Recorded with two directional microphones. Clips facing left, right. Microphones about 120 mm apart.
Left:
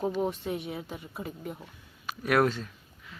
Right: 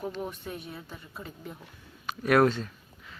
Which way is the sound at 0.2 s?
25° left (ahead or behind).